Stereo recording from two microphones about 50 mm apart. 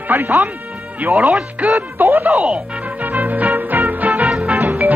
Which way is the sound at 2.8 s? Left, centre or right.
Right.